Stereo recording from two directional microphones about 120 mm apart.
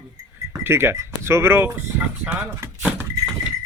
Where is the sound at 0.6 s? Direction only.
20° right (ahead or behind).